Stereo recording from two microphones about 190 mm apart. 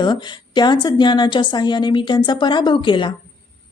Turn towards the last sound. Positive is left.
turn(degrees=25)  # may be behind; listen again after turning